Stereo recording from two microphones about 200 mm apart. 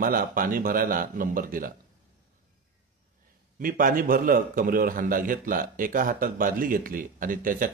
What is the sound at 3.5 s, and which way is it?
A man's voice, 45° right (ahead or behind).